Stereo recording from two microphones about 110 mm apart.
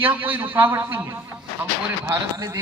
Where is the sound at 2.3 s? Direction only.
30° right (ahead or behind).